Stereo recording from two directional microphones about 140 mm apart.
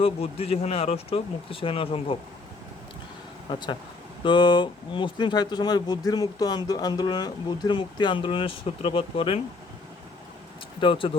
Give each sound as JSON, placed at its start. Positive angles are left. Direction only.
{"t": 0.0, "sound": "speech", "side_deg": 45}
{"t": 3.5, "sound": "speech", "side_deg": 35}
{"t": 10.8, "sound": "speech", "side_deg": 40}